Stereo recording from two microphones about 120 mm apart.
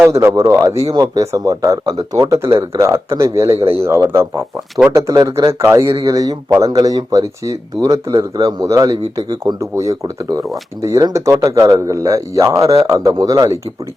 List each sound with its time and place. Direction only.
0.0 s a man's voice: 20° right (ahead or behind)